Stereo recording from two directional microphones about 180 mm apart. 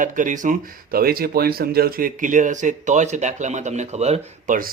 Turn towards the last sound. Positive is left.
turn(degrees=-35)  # may be behind; listen again after turning